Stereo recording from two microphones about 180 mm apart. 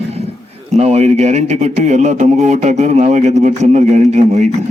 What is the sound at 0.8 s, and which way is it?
A man's voice, 35° right (ahead or behind).